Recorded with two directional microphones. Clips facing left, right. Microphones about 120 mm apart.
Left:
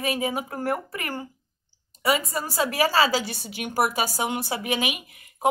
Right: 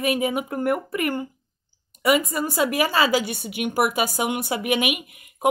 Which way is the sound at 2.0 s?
35° left (ahead or behind).